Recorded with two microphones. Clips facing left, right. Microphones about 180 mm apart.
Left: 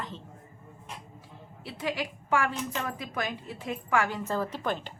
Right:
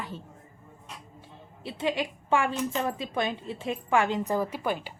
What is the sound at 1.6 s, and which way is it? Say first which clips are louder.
A woman's voice: right 4 dB; 25° right (ahead or behind).